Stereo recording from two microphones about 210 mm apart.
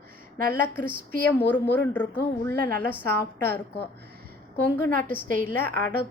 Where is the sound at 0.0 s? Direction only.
45° right (ahead or behind).